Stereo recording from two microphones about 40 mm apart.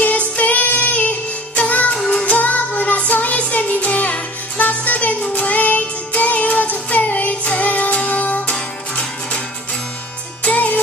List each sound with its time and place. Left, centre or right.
0.0 s music: left
8.5 s music: left
10.4 s music: left